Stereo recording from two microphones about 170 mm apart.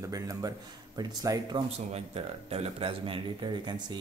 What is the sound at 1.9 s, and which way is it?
Speech, 35° right (ahead or behind).